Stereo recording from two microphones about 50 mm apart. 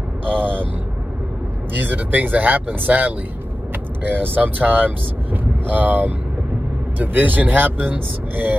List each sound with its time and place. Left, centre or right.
1.8 s speech: right